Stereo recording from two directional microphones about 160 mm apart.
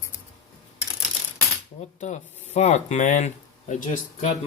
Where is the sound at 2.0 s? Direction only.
45° left (ahead or behind).